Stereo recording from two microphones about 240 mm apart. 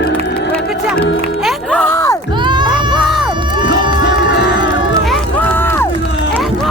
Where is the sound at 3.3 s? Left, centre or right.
Centre.